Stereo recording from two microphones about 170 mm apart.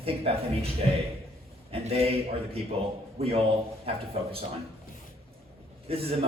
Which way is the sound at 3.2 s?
35° right (ahead or behind).